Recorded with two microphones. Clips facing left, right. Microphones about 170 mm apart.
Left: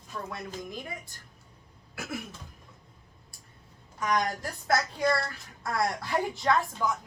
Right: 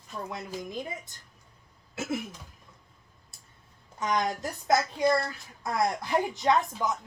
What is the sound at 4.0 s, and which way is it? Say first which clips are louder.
Speech: even; 20° right (ahead or behind).